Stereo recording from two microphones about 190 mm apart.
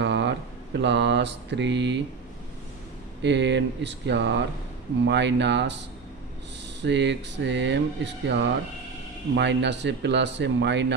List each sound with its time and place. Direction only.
0.0 s mantra: 65° right (ahead or behind)
3.2 s speech: 65° right (ahead or behind)